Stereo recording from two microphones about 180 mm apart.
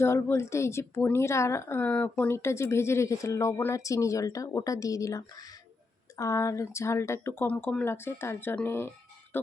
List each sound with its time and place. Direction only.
0.0 s a woman's voice: 15° left (ahead or behind)